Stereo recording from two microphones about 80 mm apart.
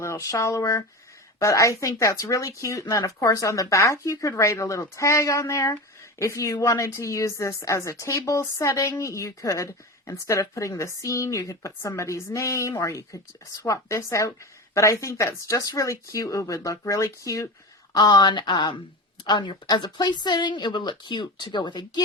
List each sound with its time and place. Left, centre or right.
0.0 s speech: left
2.8 s speech: left
17.9 s speech: left
19.6 s speech: left